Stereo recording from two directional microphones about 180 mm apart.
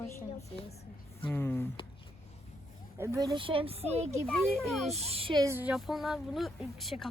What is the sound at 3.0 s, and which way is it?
A child's voice, 15° right (ahead or behind).